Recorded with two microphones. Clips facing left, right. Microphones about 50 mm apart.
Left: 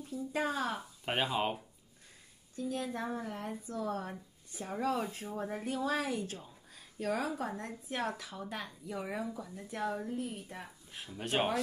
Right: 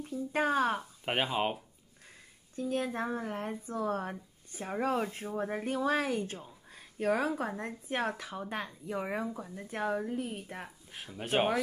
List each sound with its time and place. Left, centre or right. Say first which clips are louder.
0.0 s speech: right 4 dB; right
1.0 s speech: right 1 dB; right
2.5 s speech: right 4 dB; right
11.1 s speech: right 3 dB; centre